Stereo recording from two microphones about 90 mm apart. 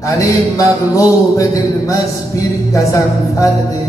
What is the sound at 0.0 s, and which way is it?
A man's voice, 35° left (ahead or behind).